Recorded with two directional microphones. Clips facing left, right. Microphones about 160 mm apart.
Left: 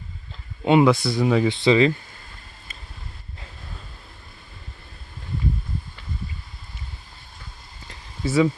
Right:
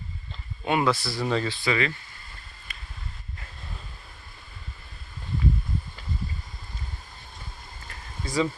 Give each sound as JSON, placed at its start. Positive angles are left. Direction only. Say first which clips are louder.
{"t": 0.6, "sound": "speech", "louder": "left 8 dB", "side_deg": 20}
{"t": 1.5, "sound": "speech", "louder": "left 9 dB", "side_deg": 25}
{"t": 8.2, "sound": "speech", "louder": "left 6 dB", "side_deg": 5}